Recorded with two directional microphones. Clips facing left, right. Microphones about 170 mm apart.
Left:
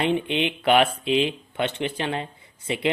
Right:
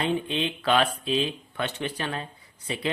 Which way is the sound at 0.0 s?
20° left (ahead or behind).